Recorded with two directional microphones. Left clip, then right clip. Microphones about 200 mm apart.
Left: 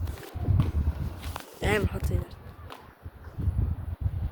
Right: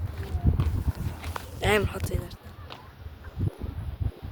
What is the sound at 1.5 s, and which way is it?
Speech, 10° right (ahead or behind).